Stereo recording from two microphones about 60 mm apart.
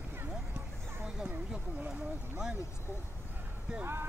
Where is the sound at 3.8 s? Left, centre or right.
Right.